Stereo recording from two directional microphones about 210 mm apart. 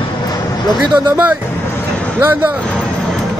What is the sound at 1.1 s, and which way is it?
Speech, 10° right (ahead or behind).